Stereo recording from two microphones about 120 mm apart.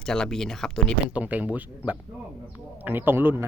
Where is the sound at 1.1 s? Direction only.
10° right (ahead or behind).